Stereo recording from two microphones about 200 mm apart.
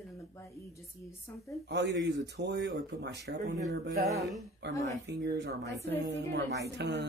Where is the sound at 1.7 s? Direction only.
60° right (ahead or behind).